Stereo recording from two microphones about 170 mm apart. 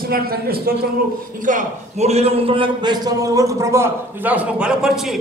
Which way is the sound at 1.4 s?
45° right (ahead or behind).